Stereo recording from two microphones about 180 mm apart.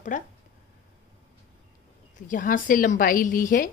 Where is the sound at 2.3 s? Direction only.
45° left (ahead or behind).